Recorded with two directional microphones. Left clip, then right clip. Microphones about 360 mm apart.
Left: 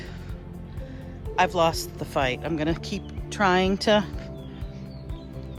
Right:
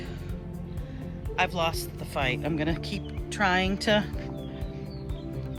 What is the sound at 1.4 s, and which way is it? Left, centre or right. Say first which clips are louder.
Speech: left 5 dB; centre.